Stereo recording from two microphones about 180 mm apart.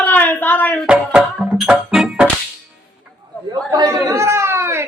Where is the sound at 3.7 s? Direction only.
20° right (ahead or behind).